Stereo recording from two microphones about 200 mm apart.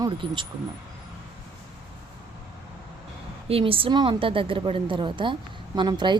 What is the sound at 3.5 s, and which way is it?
Speech, 30° right (ahead or behind).